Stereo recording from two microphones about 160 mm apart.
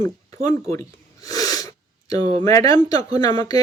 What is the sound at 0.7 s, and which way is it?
Gasp, 20° left (ahead or behind).